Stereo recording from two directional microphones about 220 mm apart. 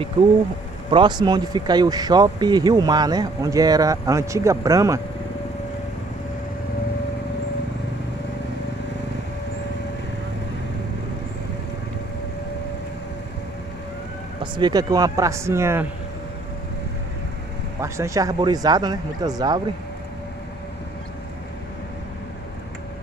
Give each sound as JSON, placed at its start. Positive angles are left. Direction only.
{"t": 0.8, "sound": "speech", "side_deg": -20}
{"t": 14.4, "sound": "speech", "side_deg": -20}
{"t": 17.7, "sound": "speech", "side_deg": -15}